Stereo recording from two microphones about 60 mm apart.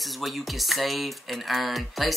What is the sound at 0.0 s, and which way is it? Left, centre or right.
A child's voice, centre.